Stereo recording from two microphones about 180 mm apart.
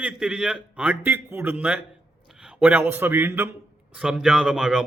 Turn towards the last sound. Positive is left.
turn(degrees=-5)  # may be behind; listen again after turning